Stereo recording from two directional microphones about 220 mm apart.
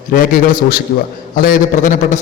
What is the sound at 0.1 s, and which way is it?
A man's voice, 40° left (ahead or behind).